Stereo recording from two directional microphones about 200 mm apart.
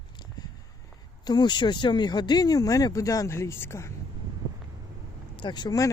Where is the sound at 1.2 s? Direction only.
20° left (ahead or behind).